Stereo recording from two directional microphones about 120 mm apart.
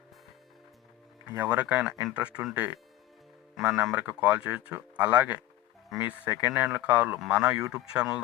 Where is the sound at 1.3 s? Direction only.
15° right (ahead or behind).